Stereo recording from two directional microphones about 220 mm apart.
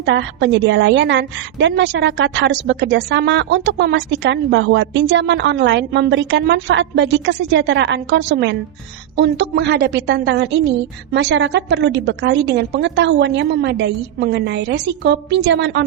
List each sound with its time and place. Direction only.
0.0 s a woman's voice: 55° right (ahead or behind)